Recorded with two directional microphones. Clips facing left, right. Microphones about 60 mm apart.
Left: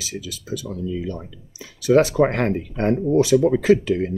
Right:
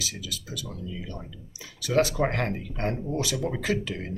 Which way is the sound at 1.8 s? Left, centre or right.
Left.